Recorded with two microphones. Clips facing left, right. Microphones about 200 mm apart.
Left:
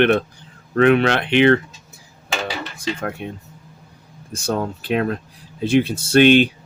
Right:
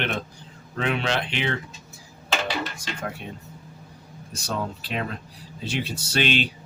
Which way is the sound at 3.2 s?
55° left (ahead or behind).